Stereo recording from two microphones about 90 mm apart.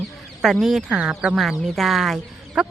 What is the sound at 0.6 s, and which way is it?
Speech, 5° right (ahead or behind).